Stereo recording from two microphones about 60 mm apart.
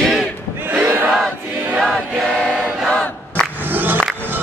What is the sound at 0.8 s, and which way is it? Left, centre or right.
Battle cry, right.